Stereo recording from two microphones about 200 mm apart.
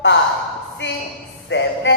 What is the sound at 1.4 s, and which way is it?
Music, 65° left (ahead or behind).